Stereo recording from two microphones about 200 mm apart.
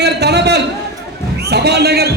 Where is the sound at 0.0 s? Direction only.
55° right (ahead or behind).